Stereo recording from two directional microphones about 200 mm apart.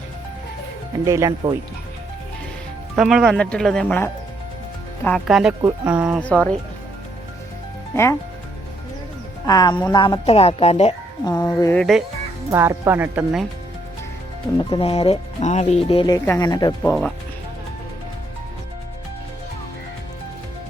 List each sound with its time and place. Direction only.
1.0 s speech: 15° right (ahead or behind)
2.9 s speech: 5° right (ahead or behind)
6.1 s speech: 5° left (ahead or behind)
9.5 s speech: 20° left (ahead or behind)
11.3 s speech: 15° left (ahead or behind)
11.8 s speech: centre (ahead or behind)
12.5 s speech: 15° right (ahead or behind)
14.6 s speech: 25° left (ahead or behind)
16.8 s speech: 5° left (ahead or behind)